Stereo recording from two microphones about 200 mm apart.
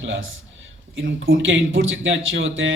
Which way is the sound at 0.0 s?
65° right (ahead or behind).